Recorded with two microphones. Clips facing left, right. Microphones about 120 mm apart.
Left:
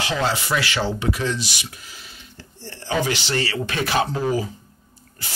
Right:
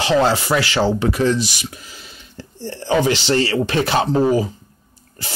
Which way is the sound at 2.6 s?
30° right (ahead or behind).